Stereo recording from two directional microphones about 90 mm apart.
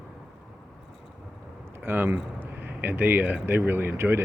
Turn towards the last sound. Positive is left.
turn(degrees=-25)  # may be behind; listen again after turning